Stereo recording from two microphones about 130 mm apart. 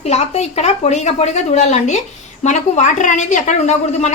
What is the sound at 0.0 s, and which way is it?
A woman's voice, 55° left (ahead or behind).